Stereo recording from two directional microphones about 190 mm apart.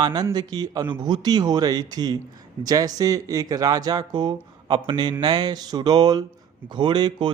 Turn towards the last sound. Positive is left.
turn(degrees=-25)  # may be behind; listen again after turning